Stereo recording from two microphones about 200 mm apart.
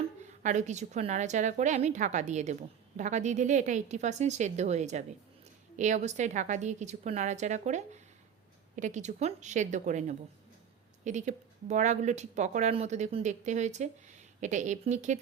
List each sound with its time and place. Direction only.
0.4 s speech: 35° right (ahead or behind)